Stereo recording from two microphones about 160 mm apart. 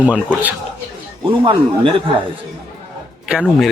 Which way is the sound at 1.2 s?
35° right (ahead or behind).